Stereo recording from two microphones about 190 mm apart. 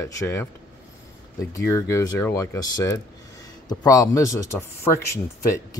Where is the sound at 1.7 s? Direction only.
15° left (ahead or behind).